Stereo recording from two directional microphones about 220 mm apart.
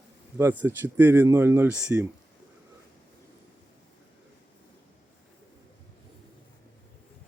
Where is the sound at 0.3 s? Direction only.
10° right (ahead or behind).